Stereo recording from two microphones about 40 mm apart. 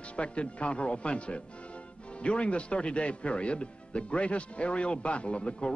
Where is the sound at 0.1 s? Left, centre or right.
Left.